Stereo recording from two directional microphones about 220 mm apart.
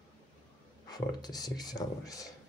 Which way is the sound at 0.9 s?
15° left (ahead or behind).